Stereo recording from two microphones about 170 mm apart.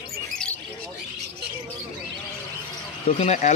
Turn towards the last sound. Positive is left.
turn(degrees=40)  # may be behind; listen again after turning